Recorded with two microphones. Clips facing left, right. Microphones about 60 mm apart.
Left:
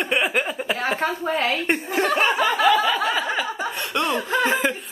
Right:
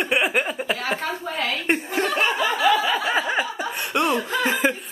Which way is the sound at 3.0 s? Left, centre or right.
Right.